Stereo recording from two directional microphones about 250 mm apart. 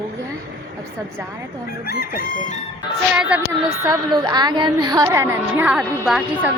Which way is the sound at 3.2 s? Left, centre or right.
Centre.